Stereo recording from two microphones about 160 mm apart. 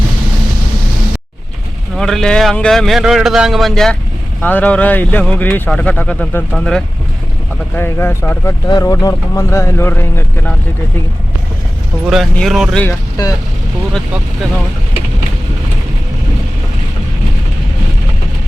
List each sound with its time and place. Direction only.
2.0 s a man's voice: 5° left (ahead or behind)
12.0 s a man's voice: centre (ahead or behind)